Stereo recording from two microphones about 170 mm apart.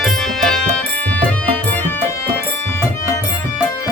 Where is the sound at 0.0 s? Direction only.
Centre (ahead or behind).